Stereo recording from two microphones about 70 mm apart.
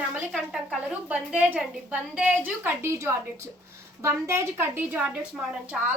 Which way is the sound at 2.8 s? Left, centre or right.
Right.